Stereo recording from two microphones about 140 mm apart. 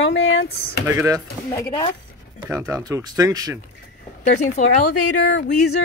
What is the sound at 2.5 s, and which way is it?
Speech, 25° right (ahead or behind).